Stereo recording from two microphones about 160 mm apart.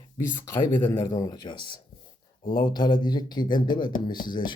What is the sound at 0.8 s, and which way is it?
Speech, 15° left (ahead or behind).